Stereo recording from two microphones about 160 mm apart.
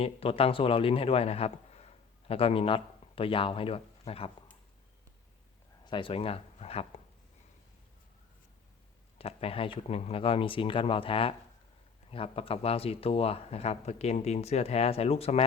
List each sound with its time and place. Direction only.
0.0 s a man's voice: 35° left (ahead or behind)
5.8 s speech: 30° left (ahead or behind)
9.1 s speech: 35° left (ahead or behind)